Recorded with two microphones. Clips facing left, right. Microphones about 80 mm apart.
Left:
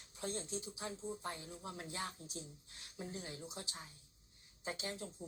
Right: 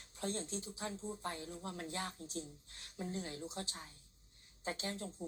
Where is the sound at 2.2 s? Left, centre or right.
Centre.